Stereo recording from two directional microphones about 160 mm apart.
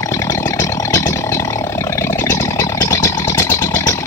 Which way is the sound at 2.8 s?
15° left (ahead or behind).